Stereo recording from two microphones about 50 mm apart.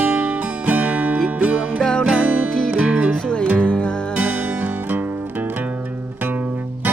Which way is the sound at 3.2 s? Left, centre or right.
Centre.